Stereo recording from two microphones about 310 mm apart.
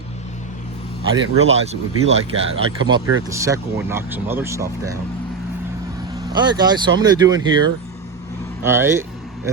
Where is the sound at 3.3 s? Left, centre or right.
Centre.